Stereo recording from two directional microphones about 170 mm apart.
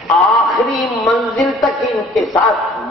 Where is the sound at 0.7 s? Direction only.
Centre (ahead or behind).